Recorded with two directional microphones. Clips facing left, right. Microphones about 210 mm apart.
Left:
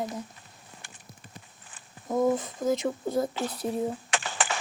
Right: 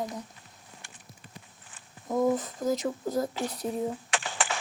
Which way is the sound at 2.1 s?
Centre (ahead or behind).